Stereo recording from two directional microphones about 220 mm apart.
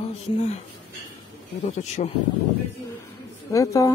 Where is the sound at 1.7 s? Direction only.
30° left (ahead or behind).